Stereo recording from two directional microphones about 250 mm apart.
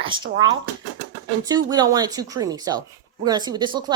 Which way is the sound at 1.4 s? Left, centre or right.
Centre.